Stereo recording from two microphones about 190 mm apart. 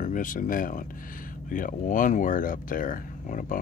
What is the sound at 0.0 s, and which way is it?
Speech, 45° left (ahead or behind).